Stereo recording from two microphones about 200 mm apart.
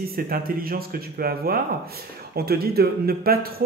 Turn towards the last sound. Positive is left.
turn(degrees=-50)  # may be behind; listen again after turning